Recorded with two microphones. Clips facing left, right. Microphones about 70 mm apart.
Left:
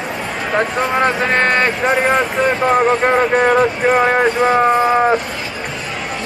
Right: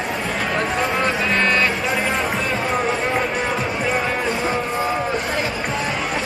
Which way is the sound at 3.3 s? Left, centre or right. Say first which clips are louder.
Left 9 dB; left.